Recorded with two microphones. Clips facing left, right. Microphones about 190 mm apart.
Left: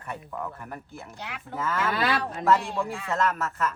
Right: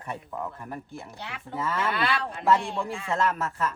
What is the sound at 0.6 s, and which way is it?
Speech, centre (ahead or behind).